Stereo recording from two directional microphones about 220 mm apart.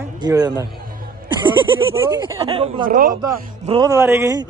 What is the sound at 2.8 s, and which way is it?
Speech, 40° right (ahead or behind).